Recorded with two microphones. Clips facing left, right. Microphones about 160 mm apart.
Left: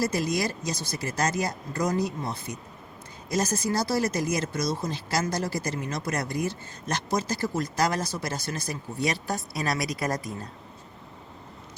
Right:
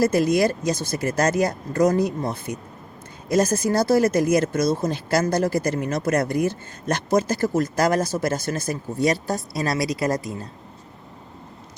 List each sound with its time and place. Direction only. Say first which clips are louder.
0.0 s speech: right 8 dB; 55° right (ahead or behind); by 10.3 s 25° right (ahead or behind)